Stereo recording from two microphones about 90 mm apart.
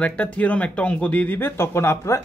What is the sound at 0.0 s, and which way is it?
Speech, 15° left (ahead or behind).